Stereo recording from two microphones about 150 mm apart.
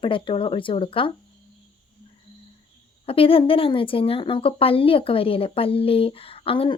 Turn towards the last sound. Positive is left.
turn(degrees=35)  # may be behind; listen again after turning